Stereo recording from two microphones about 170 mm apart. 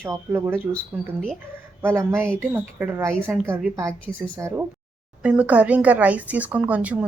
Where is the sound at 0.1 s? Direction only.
15° right (ahead or behind).